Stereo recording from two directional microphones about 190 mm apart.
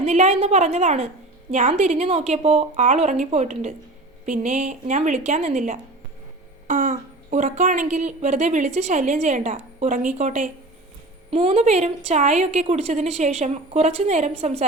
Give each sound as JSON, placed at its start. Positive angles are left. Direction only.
{"t": 0.0, "sound": "a woman's voice", "side_deg": -35}